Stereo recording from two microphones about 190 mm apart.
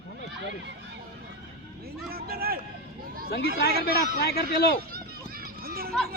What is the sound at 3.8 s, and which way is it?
Speech, 55° left (ahead or behind).